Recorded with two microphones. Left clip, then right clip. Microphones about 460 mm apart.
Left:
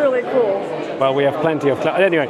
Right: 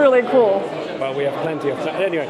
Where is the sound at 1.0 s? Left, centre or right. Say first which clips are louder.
Left 6 dB; left.